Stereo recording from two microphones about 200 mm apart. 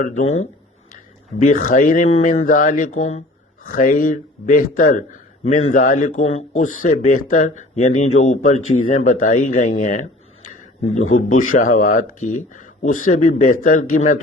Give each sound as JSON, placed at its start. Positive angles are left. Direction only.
{"t": 0.0, "sound": "speech", "side_deg": 35}
{"t": 1.4, "sound": "speech", "side_deg": 40}